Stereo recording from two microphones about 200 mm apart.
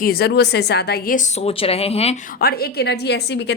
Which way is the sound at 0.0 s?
50° left (ahead or behind).